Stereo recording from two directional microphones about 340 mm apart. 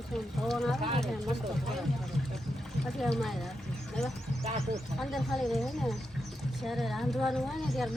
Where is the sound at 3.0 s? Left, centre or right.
Centre.